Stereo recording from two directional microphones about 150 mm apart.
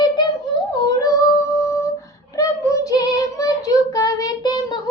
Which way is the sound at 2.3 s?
20° left (ahead or behind).